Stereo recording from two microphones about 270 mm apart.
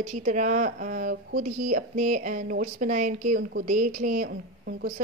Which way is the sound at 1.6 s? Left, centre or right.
Right.